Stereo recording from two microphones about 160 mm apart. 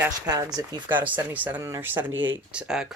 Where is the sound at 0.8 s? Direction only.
10° right (ahead or behind).